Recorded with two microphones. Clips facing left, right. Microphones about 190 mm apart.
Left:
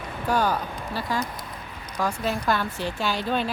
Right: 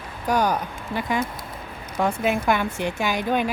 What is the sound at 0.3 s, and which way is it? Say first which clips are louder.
Speech: right 2 dB; 15° right (ahead or behind).